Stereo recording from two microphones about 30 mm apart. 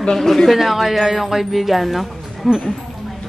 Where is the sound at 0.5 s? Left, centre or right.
Centre.